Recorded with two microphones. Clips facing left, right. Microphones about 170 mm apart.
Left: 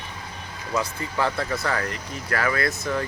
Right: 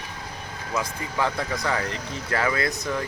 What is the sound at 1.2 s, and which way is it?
Speech, 15° right (ahead or behind).